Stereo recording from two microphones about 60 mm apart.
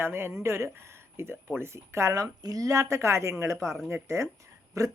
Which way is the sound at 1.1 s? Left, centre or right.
Right.